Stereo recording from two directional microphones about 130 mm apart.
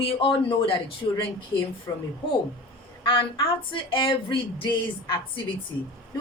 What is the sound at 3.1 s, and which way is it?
Speech, 40° left (ahead or behind).